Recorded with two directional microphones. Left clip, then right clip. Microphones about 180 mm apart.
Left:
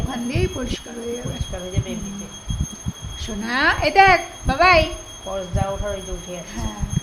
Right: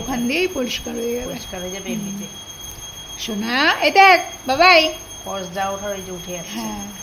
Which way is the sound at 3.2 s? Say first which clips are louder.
Right 1 dB; 20° right (ahead or behind).